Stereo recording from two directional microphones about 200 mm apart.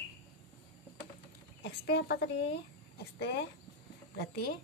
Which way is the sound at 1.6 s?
55° left (ahead or behind).